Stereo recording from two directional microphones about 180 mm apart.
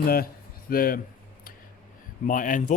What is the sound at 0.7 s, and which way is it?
Speech, 55° left (ahead or behind).